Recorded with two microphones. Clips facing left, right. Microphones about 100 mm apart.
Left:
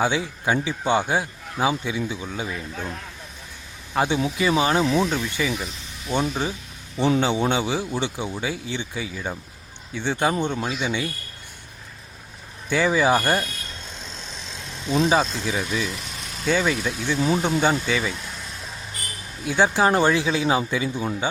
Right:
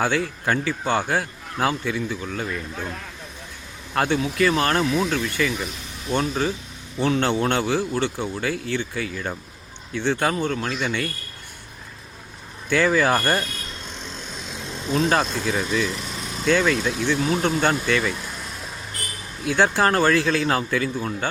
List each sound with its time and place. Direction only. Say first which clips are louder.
0.0 s a man's voice: even; 10° left (ahead or behind)
3.9 s a man's voice: right 1 dB; 10° left (ahead or behind)
12.6 s a man's voice: right 1 dB; 10° left (ahead or behind)
15.2 s a man's voice: right 1 dB; 5° left (ahead or behind)
19.5 s a man's voice: even; 10° left (ahead or behind)